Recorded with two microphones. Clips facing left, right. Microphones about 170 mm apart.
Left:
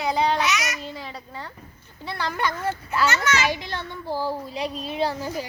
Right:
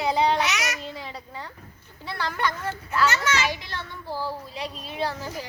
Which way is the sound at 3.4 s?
15° left (ahead or behind).